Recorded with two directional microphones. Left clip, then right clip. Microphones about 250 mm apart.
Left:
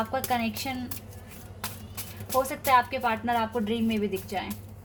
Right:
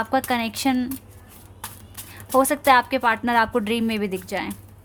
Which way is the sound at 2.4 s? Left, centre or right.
Right.